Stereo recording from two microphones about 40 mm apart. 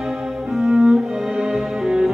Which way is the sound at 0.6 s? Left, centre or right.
Centre.